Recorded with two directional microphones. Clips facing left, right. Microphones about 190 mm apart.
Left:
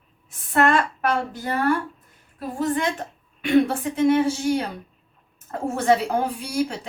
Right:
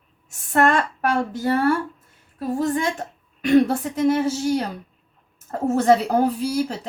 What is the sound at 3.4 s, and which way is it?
A woman's voice, 40° right (ahead or behind).